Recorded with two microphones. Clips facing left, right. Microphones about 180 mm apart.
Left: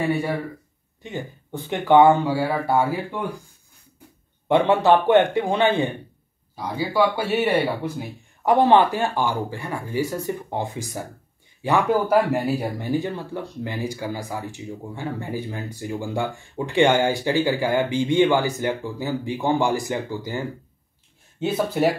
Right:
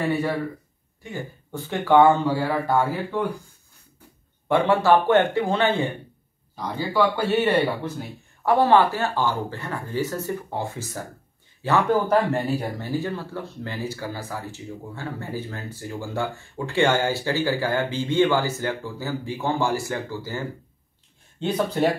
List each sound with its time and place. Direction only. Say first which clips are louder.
0.1 s speech: even; 10° left (ahead or behind)
4.5 s speech: left 2 dB; 20° left (ahead or behind)
21.4 s speech: left 1 dB; 5° left (ahead or behind)